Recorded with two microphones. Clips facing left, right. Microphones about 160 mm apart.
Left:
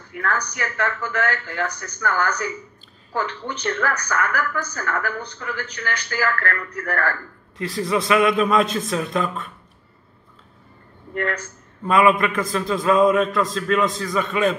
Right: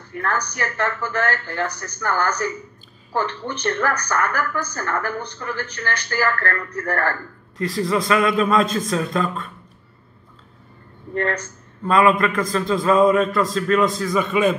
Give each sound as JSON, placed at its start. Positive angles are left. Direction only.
{"t": 0.6, "sound": "a woman's voice", "side_deg": -40}
{"t": 7.6, "sound": "a man's voice", "side_deg": 0}
{"t": 11.8, "sound": "a man's voice", "side_deg": 5}